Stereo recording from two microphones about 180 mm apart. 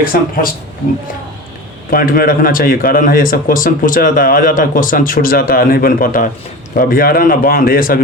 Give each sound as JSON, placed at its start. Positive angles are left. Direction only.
{"t": 0.0, "sound": "a man's voice", "side_deg": 50}
{"t": 1.9, "sound": "a man's voice", "side_deg": 55}